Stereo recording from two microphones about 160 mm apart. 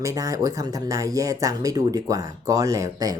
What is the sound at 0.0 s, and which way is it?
Speech, 20° right (ahead or behind).